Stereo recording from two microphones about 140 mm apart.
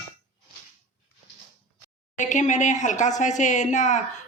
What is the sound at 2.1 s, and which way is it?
Speech, 60° left (ahead or behind).